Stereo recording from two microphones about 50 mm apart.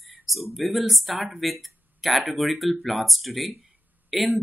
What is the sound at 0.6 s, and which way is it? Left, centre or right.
Speech, centre.